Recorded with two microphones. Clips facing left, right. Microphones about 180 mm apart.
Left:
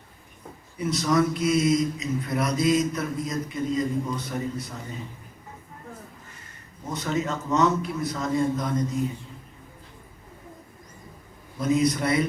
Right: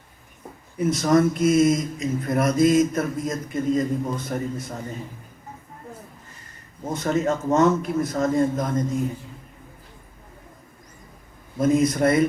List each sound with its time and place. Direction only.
0.8 s speech: 50° right (ahead or behind)
6.9 s speech: 50° right (ahead or behind)
11.5 s speech: 50° right (ahead or behind)